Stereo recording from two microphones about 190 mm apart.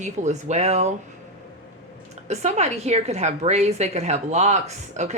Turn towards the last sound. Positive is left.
turn(degrees=-35)  # may be behind; listen again after turning